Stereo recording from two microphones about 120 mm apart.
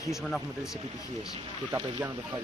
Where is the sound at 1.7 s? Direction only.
30° right (ahead or behind).